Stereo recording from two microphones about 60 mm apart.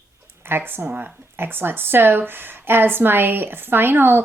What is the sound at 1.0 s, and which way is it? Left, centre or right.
Speech, right.